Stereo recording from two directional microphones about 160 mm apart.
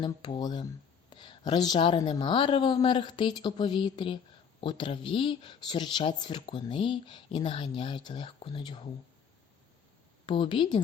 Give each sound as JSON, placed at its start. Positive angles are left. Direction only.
{"t": 0.0, "sound": "a woman's voice", "side_deg": 30}
{"t": 10.2, "sound": "a woman's voice", "side_deg": 30}